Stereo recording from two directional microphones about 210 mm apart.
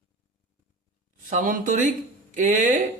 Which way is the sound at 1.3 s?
40° right (ahead or behind).